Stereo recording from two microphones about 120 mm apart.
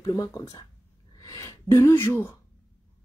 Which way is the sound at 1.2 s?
30° left (ahead or behind).